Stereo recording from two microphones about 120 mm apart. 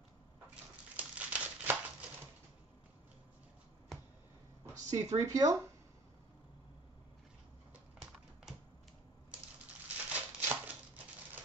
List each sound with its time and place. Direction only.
0.9 s crumpling: 10° right (ahead or behind)
4.8 s speech: 25° right (ahead or behind)
10.0 s a sound: 10° right (ahead or behind)